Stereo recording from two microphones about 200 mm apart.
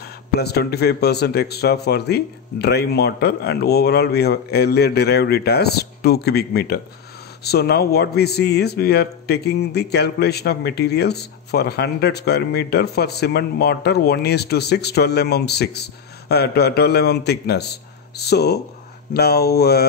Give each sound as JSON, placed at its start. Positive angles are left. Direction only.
{"t": 0.0, "sound": "a man's voice", "side_deg": 55}